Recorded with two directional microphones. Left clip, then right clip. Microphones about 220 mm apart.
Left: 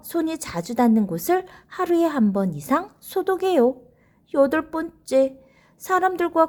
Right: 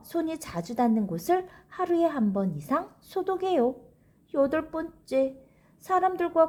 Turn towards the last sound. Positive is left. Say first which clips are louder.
# left 4 dB
turn(degrees=30)  # may be behind; listen again after turning